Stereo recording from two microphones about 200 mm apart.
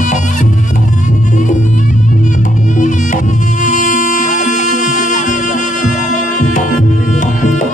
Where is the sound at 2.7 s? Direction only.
40° left (ahead or behind).